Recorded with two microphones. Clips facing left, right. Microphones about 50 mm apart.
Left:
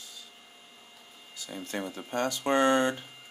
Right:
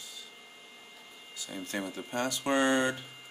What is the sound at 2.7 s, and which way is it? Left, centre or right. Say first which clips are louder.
Speech: left 2 dB; left.